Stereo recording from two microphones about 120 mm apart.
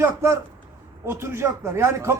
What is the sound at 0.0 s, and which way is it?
Speech, 20° right (ahead or behind).